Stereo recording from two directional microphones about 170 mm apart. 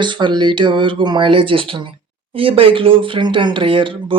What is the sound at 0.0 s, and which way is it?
Speech, 30° right (ahead or behind).